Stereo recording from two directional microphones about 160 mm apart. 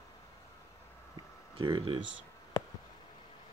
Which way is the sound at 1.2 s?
30° right (ahead or behind).